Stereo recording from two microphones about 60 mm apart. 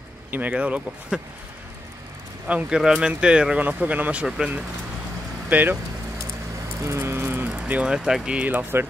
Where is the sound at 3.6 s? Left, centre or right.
Right.